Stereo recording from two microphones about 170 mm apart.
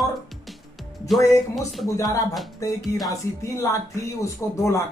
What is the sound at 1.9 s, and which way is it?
Speech, 20° left (ahead or behind).